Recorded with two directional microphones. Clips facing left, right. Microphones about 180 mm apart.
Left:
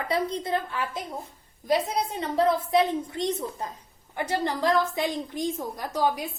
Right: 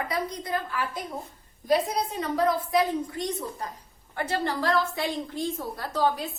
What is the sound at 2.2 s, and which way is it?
A woman's voice, 25° left (ahead or behind).